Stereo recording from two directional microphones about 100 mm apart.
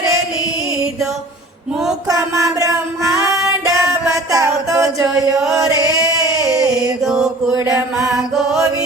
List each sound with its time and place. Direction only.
2.0 s music: 35° right (ahead or behind)
5.7 s chant: 40° left (ahead or behind)
6.3 s a sound: 35° right (ahead or behind)
7.0 s mantra: centre (ahead or behind)